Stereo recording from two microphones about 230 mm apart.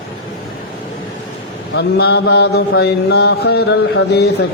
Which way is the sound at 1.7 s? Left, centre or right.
Left.